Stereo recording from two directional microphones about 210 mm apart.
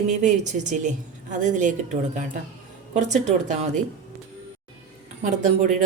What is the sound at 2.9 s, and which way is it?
Speech, 35° right (ahead or behind).